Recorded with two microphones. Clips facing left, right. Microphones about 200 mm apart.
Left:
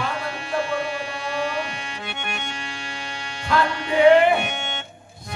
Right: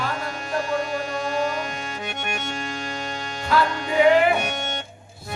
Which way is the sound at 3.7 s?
45° right (ahead or behind).